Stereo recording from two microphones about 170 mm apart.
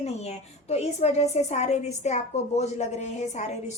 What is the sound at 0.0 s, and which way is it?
A woman's voice, 40° left (ahead or behind).